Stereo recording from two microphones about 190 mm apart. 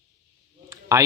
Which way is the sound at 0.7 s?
15° right (ahead or behind).